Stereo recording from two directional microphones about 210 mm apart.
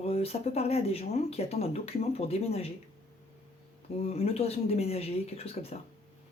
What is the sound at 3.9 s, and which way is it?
Speech, 30° left (ahead or behind).